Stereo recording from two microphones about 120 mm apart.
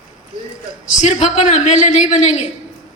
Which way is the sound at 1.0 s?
80° left.